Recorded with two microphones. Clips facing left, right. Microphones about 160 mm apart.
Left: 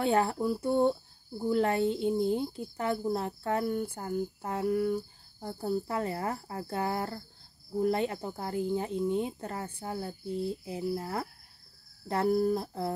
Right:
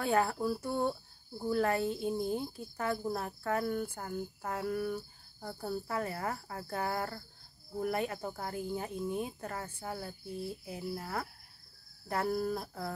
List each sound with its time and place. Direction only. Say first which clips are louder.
0.0 s speech: left 3 dB; 25° left (ahead or behind)